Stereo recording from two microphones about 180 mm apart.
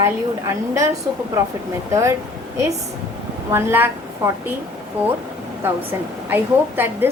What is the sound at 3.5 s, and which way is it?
Speech, 15° right (ahead or behind).